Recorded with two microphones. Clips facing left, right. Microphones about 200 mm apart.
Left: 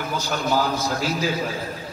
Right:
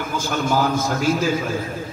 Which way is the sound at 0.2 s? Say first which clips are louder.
Right 3 dB; 50° right (ahead or behind).